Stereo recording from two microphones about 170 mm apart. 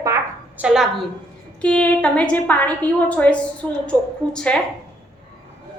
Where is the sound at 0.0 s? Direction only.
20° right (ahead or behind).